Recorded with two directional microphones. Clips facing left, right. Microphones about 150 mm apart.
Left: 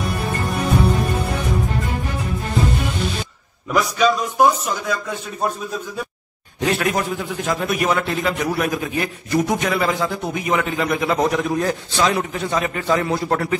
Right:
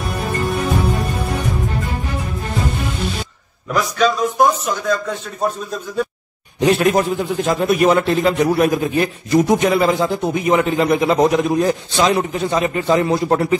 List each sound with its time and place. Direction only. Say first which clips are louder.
4.0 s speech: right 1 dB; 10° left (ahead or behind)
6.6 s a man's voice: right 6 dB; 25° right (ahead or behind)